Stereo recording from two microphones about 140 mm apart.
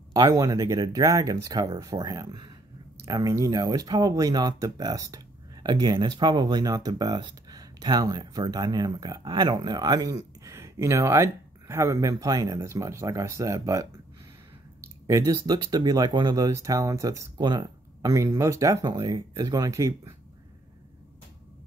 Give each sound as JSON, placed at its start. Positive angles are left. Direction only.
{"t": 0.1, "sound": "speech", "side_deg": -25}